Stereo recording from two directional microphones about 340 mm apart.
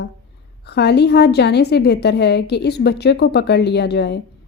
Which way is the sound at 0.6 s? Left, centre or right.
Left.